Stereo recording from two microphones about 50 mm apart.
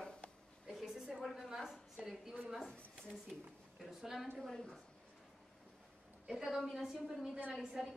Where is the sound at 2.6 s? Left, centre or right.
Centre.